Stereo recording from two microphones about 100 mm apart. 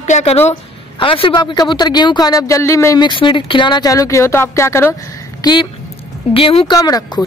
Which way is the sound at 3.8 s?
35° left (ahead or behind).